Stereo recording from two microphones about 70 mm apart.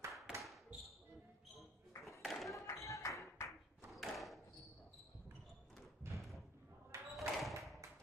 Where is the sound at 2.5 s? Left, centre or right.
Left.